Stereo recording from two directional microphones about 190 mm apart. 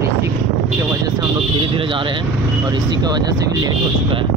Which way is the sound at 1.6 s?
25° right (ahead or behind).